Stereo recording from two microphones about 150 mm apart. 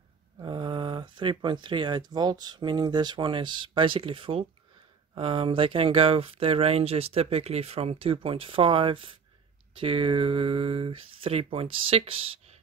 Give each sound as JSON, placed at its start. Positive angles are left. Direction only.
{"t": 0.4, "sound": "speech", "side_deg": -35}